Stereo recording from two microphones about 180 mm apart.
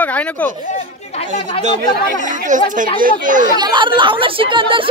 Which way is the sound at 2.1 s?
45° right (ahead or behind).